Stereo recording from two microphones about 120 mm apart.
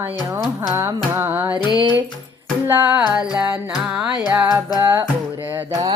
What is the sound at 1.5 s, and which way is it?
Music, 35° left (ahead or behind).